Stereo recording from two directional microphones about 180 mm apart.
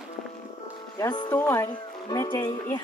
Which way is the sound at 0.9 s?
25° left (ahead or behind).